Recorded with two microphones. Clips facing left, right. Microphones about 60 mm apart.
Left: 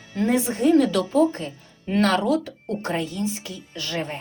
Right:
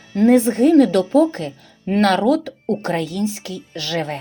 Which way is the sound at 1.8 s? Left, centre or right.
Right.